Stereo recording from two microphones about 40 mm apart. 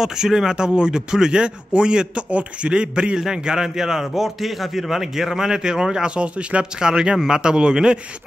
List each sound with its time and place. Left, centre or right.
0.0 s a man's voice: centre